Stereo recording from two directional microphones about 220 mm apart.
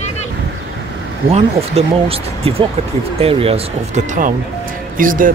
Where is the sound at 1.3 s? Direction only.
25° right (ahead or behind).